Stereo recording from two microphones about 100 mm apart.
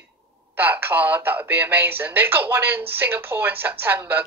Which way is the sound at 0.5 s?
20° right (ahead or behind).